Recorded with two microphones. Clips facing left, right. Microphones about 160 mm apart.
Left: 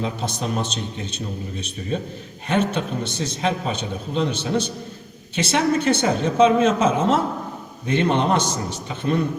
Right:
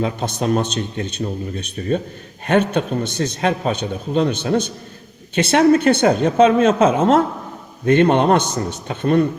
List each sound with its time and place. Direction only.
0.0 s speech: 55° right (ahead or behind)
2.5 s speech: 55° right (ahead or behind)